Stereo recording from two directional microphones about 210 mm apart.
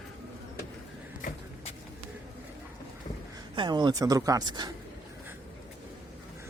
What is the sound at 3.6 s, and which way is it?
Speech, 20° right (ahead or behind).